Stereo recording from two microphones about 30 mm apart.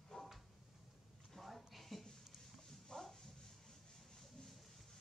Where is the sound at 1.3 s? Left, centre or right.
Centre.